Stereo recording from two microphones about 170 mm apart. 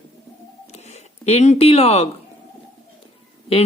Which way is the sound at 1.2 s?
40° left (ahead or behind).